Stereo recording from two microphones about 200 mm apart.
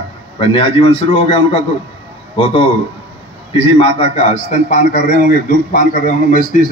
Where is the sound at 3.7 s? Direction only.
30° left (ahead or behind).